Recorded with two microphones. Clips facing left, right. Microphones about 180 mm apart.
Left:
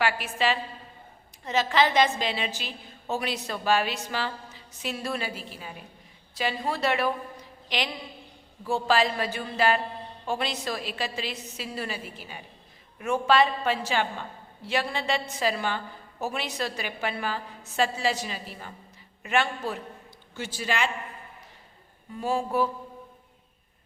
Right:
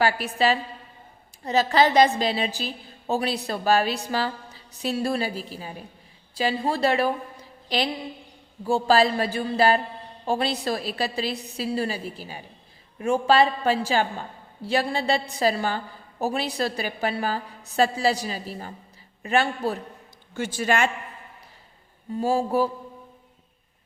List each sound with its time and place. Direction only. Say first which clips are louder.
0.0 s a woman's voice: right 4 dB; 40° right (ahead or behind)
20.3 s a man's voice: right 6 dB; 50° right (ahead or behind)
22.1 s a woman's voice: right 4 dB; 35° right (ahead or behind)